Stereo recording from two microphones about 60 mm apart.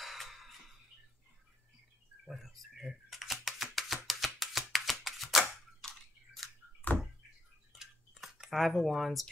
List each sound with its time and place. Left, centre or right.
0.0 s music: centre
2.2 s a sound: centre
6.8 s door: left
7.7 s cutlery: centre